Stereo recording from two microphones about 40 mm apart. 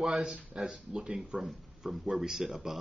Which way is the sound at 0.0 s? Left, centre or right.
Centre.